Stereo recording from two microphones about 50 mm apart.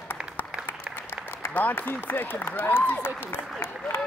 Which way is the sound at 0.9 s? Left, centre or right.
Centre.